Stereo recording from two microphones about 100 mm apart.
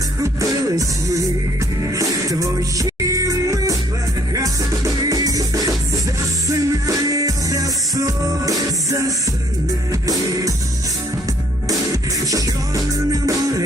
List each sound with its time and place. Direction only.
0.2 s music: 35° right (ahead or behind)
11.7 s music: 35° right (ahead or behind)